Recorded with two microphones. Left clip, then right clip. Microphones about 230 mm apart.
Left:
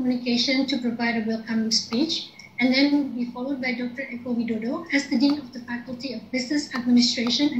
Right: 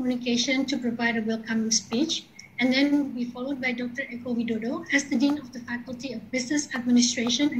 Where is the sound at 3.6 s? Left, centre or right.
Centre.